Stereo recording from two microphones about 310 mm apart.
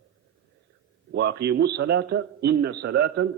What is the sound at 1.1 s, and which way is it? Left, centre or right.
A man's voice, right.